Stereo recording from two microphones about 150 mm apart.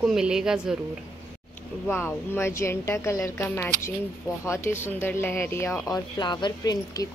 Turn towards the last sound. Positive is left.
turn(degrees=25)  # may be behind; listen again after turning